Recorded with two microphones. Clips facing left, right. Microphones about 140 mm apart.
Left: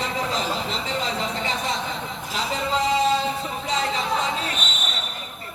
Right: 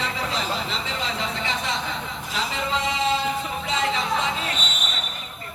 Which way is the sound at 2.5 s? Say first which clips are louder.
Left 6 dB; 40° left (ahead or behind).